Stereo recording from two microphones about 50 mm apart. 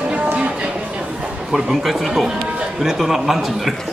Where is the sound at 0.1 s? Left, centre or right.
Right.